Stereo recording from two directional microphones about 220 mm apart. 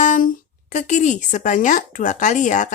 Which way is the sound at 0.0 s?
35° left (ahead or behind).